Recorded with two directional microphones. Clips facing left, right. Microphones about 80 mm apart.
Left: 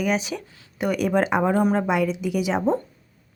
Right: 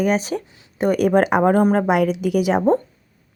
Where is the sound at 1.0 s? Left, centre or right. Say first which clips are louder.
Right 5 dB; right.